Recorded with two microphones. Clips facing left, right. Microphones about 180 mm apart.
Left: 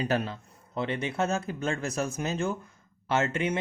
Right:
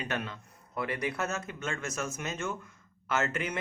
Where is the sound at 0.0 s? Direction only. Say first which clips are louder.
Left 7 dB; 35° left (ahead or behind).